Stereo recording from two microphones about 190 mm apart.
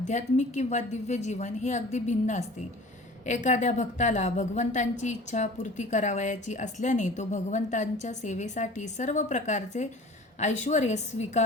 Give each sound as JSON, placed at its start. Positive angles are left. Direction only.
{"t": 0.0, "sound": "a woman's voice", "side_deg": 40}